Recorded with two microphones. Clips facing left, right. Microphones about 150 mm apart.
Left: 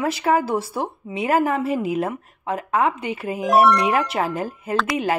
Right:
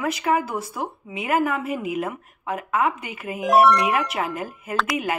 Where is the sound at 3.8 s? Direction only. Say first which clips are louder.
Left 3 dB; 30° left (ahead or behind).